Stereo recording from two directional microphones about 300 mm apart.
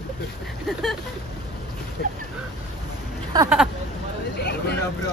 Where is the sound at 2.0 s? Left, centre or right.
Left.